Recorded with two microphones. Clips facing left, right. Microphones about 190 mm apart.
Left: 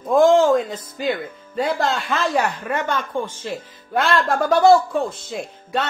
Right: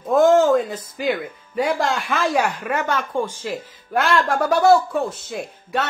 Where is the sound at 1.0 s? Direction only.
10° right (ahead or behind).